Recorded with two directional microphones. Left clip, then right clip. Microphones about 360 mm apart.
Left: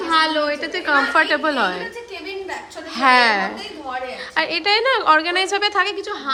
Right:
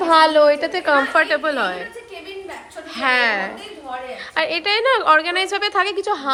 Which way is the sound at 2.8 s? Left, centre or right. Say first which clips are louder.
Left 3 dB; centre.